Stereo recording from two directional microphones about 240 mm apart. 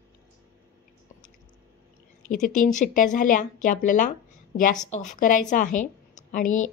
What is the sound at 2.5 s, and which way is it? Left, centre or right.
Speech, left.